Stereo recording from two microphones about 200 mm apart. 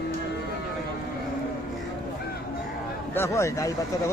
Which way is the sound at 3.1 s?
15° left (ahead or behind).